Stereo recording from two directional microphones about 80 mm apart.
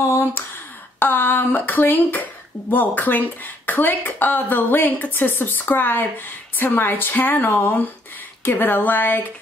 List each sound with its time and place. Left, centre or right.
0.0 s speech: left